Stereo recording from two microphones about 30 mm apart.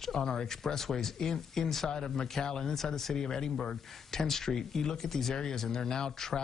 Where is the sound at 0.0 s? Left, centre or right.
Left.